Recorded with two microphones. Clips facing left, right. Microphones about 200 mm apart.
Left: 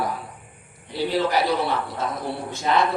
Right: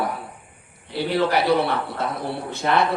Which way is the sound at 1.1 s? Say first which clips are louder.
Right 3 dB; 60° right (ahead or behind).